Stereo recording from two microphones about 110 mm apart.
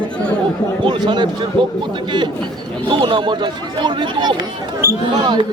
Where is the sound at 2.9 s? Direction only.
45° right (ahead or behind).